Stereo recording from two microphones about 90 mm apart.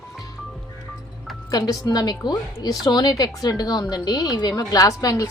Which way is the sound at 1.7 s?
45° left (ahead or behind).